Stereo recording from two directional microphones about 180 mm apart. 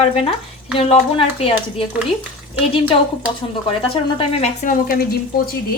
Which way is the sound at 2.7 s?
30° left (ahead or behind).